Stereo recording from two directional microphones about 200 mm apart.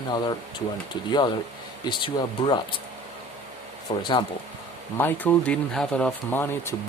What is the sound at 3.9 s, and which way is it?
Speech, 25° left (ahead or behind).